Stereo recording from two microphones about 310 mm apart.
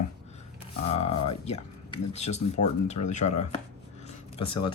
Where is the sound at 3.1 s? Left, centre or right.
Left.